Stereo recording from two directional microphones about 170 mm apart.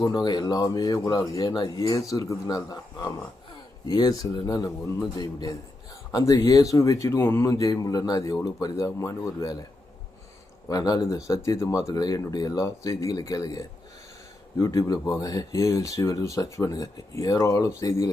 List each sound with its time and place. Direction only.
0.0 s speech: 25° left (ahead or behind)
10.7 s speech: 20° left (ahead or behind)